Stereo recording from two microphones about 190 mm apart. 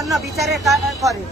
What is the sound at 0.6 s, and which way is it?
Speech, 15° right (ahead or behind).